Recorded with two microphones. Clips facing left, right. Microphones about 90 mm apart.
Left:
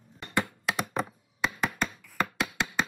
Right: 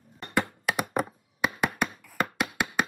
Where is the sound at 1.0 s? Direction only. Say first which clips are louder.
Right 3 dB; 10° right (ahead or behind).